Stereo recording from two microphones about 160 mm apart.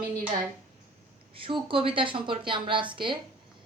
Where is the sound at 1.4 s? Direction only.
35° right (ahead or behind).